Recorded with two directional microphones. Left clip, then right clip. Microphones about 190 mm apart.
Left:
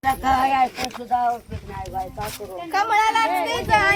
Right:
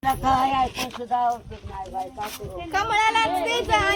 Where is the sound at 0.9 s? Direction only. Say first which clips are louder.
Left 2 dB; 5° right (ahead or behind).